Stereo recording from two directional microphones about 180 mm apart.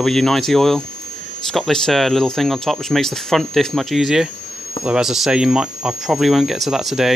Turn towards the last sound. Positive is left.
turn(degrees=0)  # may be behind; listen again after turning